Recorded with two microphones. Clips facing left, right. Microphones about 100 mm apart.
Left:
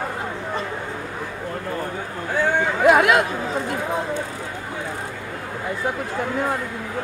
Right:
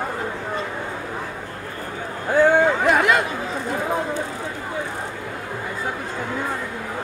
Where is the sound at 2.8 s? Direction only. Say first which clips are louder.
Left 3 dB; 5° left (ahead or behind).